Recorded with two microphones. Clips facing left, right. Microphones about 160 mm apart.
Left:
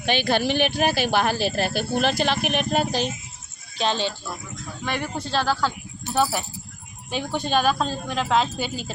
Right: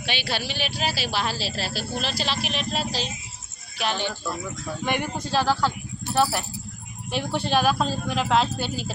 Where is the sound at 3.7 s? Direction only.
20° left (ahead or behind).